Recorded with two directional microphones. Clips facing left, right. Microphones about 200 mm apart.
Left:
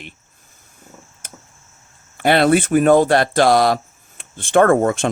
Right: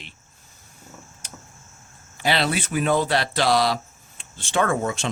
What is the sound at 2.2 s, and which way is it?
Speech, 55° left (ahead or behind).